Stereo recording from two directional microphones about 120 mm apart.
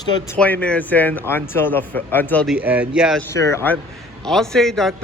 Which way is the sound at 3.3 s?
25° left (ahead or behind).